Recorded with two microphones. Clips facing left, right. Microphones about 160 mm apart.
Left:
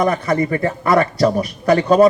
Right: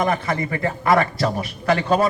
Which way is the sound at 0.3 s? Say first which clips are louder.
Left 6 dB; 40° left (ahead or behind).